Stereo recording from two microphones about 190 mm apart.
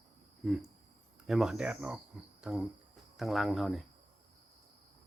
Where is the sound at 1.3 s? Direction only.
Centre (ahead or behind).